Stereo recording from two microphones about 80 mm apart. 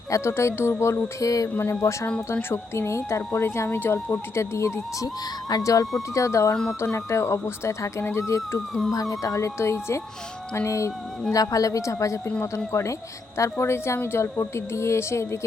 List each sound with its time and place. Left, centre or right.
0.1 s speech: left
8.9 s a woman's voice: left